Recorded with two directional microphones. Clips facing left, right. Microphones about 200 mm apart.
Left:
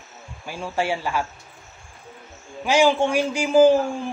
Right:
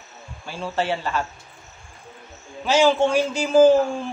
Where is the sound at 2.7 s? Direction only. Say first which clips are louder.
Right 1 dB; 10° left (ahead or behind).